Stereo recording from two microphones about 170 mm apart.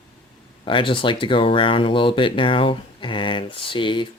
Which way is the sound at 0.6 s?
30° left (ahead or behind).